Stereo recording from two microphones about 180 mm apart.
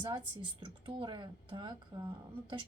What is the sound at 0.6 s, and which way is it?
Speech, 30° right (ahead or behind).